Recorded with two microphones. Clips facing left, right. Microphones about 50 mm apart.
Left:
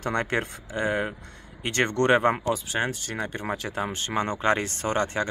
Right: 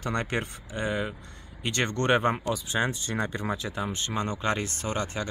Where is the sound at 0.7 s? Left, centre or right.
Left.